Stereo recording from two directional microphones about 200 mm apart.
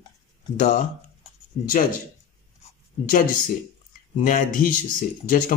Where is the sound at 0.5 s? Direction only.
40° left (ahead or behind).